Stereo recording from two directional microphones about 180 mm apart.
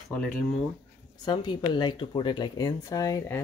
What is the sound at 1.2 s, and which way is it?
Speech, 25° left (ahead or behind).